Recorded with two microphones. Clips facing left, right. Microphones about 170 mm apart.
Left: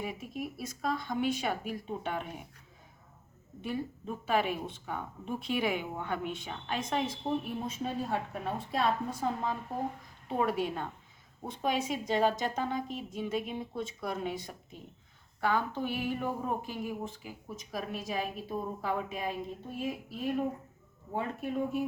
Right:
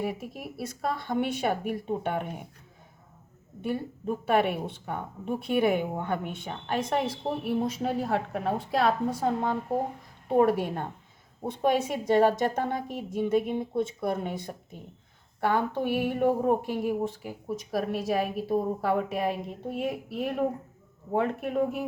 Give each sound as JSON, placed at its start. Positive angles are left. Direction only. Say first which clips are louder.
{"t": 0.0, "sound": "a woman's voice", "louder": "right 4 dB", "side_deg": -60}
{"t": 3.6, "sound": "a woman's voice", "louder": "right 4 dB", "side_deg": -55}